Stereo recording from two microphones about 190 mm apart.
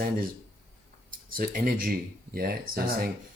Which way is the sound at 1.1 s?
45° right (ahead or behind).